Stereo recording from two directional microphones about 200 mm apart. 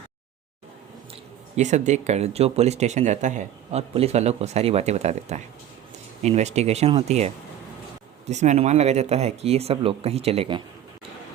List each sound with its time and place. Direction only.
1.5 s speech: 35° right (ahead or behind)